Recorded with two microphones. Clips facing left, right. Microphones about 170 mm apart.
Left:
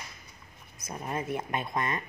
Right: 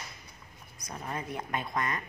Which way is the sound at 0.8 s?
20° left (ahead or behind).